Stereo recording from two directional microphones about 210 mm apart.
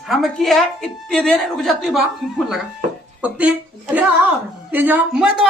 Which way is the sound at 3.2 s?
5° right (ahead or behind).